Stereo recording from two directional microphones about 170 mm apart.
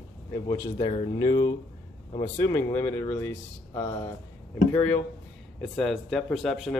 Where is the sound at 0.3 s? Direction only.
25° left (ahead or behind).